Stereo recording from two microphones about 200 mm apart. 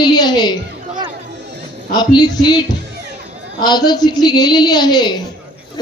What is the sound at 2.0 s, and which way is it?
A woman's voice, 20° left (ahead or behind).